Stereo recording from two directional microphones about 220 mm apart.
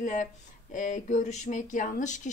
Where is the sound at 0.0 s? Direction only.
35° left (ahead or behind).